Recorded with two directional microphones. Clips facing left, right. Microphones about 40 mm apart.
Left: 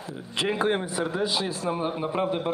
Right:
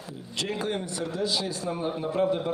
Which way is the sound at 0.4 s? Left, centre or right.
Left.